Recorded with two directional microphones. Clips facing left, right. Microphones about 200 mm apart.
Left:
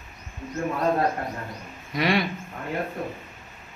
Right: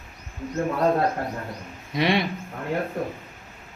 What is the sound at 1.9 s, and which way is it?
Speech, 25° right (ahead or behind).